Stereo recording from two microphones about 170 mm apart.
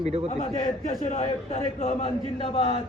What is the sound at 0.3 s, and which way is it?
A man's voice, 40° left (ahead or behind).